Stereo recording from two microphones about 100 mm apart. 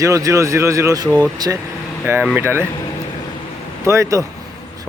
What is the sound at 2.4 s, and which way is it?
Speech, 25° right (ahead or behind).